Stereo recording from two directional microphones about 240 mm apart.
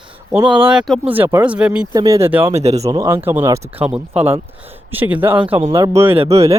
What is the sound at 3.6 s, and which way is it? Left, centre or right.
Speech, right.